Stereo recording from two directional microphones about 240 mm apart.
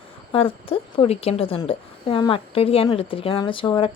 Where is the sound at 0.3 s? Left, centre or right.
Left.